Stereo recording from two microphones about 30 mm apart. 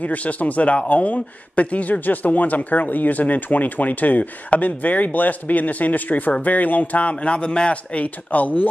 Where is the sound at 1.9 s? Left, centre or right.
Left.